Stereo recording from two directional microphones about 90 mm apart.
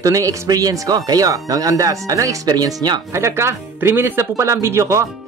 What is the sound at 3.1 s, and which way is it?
Speech, 30° right (ahead or behind).